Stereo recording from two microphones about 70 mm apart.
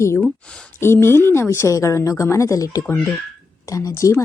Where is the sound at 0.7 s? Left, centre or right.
Left.